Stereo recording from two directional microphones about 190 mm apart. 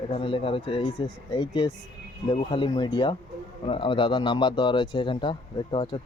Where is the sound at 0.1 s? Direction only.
25° left (ahead or behind).